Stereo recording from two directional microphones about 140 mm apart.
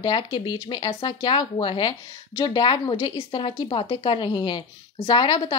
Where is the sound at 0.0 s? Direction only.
35° left (ahead or behind).